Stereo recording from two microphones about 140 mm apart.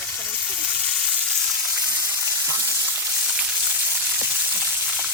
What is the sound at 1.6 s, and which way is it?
Frying, 10° right (ahead or behind).